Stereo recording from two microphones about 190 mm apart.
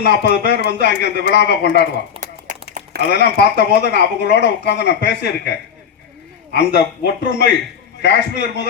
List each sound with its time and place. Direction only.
0.0 s a man's voice: 60° left (ahead or behind)
2.1 s a sound: 40° right (ahead or behind)
3.1 s a man's voice: 60° left (ahead or behind)